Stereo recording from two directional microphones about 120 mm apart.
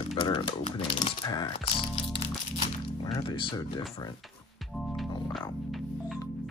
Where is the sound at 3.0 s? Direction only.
40° left (ahead or behind).